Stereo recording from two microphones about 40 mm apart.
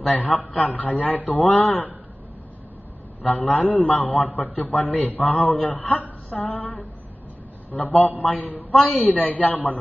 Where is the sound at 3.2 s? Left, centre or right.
Left.